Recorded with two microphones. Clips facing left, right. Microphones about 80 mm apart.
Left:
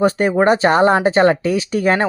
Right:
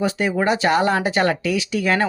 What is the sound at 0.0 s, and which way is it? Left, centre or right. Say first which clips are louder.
Speech: left 6 dB; left.